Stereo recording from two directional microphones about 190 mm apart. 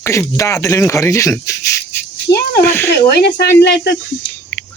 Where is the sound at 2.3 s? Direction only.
25° left (ahead or behind).